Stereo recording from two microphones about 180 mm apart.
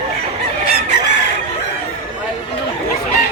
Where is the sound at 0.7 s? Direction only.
60° left (ahead or behind).